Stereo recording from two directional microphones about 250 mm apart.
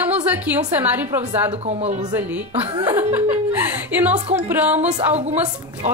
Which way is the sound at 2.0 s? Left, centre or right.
Centre.